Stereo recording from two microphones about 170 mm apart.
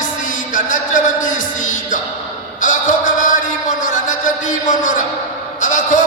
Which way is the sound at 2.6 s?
50° left (ahead or behind).